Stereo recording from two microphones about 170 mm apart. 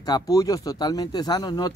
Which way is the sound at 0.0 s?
20° left (ahead or behind).